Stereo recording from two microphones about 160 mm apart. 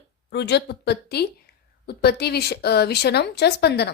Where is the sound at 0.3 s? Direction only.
90° left.